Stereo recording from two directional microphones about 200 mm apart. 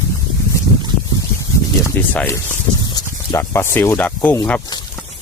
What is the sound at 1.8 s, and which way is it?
Speech, 10° left (ahead or behind).